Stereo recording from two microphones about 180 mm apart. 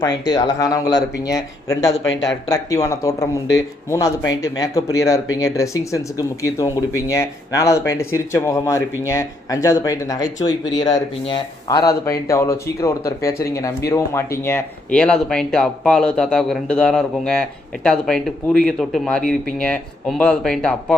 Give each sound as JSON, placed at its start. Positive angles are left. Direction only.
{"t": 0.0, "sound": "speech", "side_deg": 20}
{"t": 14.9, "sound": "speech", "side_deg": 5}